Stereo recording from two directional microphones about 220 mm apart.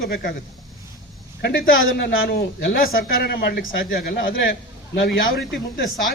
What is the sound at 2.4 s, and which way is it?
Speech, 45° left (ahead or behind).